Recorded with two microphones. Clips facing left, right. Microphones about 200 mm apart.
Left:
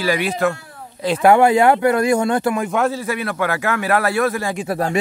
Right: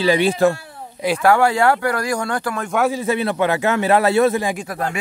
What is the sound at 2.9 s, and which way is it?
A man's voice, 20° right (ahead or behind).